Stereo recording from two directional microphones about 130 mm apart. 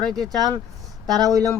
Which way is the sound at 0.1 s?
Centre (ahead or behind).